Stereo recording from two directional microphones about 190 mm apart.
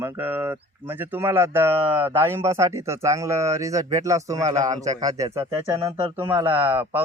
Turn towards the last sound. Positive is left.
turn(degrees=-10)  # may be behind; listen again after turning